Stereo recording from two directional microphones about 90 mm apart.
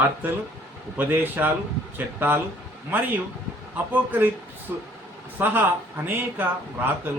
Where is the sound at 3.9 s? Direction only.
20° right (ahead or behind).